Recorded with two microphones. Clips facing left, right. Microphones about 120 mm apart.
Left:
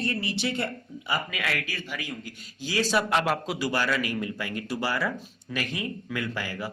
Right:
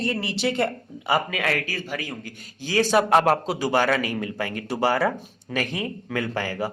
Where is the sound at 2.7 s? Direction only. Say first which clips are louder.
Right 6 dB; 50° right (ahead or behind).